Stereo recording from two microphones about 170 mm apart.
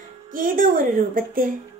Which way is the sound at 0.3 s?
55° right (ahead or behind).